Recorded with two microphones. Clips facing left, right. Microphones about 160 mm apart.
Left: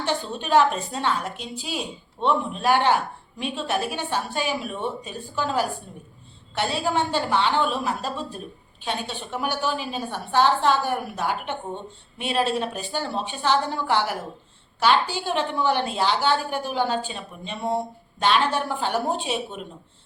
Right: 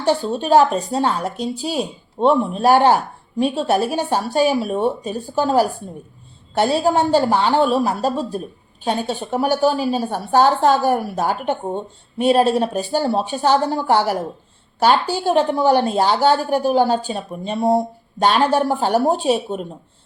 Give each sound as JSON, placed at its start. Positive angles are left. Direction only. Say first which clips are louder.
{"t": 0.0, "sound": "speech", "louder": "right 8 dB", "side_deg": -40}